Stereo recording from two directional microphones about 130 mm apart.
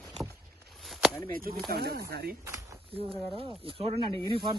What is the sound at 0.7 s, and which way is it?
Chop, centre (ahead or behind).